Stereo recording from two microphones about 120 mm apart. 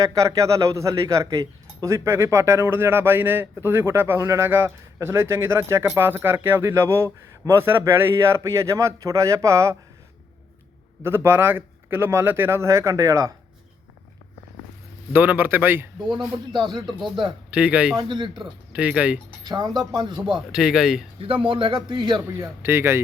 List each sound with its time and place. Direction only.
0.0 s speech: 25° right (ahead or behind)
11.0 s speech: 20° right (ahead or behind)
15.1 s speech: 15° right (ahead or behind)
16.0 s speech: 40° right (ahead or behind)
17.5 s speech: 10° right (ahead or behind)
17.9 s speech: 40° right (ahead or behind)
18.3 s speech: 10° right (ahead or behind)
19.5 s speech: 35° right (ahead or behind)
20.3 s a man's voice: 5° right (ahead or behind)
21.2 s a man's voice: 50° right (ahead or behind)
22.2 s speech: 20° right (ahead or behind)